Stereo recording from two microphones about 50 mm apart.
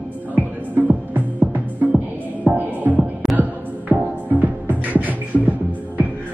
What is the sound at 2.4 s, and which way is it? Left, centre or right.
Music, right.